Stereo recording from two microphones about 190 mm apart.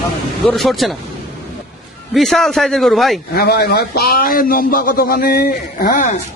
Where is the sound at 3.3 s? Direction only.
55° left (ahead or behind).